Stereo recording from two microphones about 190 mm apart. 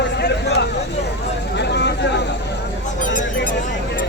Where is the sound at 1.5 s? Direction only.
65° left (ahead or behind).